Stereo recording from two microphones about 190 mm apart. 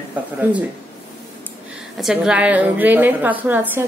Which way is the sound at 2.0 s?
5° right (ahead or behind).